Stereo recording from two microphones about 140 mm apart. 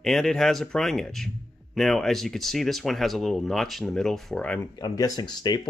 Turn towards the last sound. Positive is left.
turn(degrees=30)  # may be behind; listen again after turning